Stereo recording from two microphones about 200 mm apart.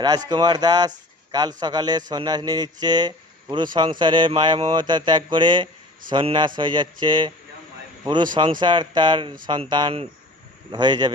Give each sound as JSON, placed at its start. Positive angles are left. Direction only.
{"t": 0.0, "sound": "speech", "side_deg": -20}